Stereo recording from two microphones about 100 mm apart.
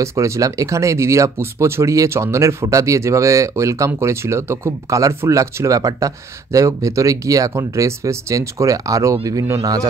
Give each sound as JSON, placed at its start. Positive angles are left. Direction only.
{"t": 0.0, "sound": "speech", "side_deg": -30}